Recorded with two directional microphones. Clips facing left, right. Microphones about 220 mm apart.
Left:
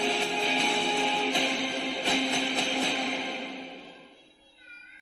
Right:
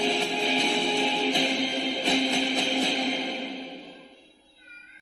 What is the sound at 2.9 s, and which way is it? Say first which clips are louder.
Music: right 4 dB; 30° right (ahead or behind).